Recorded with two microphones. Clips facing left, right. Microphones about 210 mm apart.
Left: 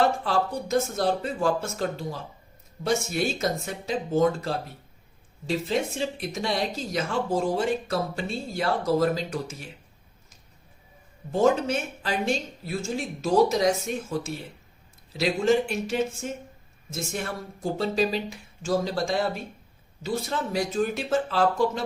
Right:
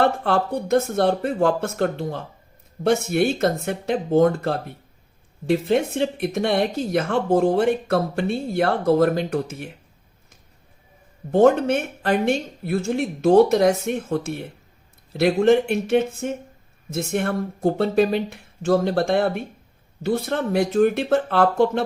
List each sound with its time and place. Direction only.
0.0 s speech: 60° right (ahead or behind)
11.3 s speech: 60° right (ahead or behind)